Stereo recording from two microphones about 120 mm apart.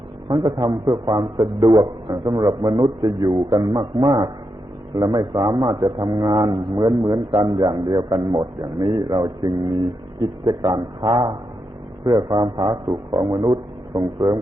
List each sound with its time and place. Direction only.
0.3 s a man's voice: 45° right (ahead or behind)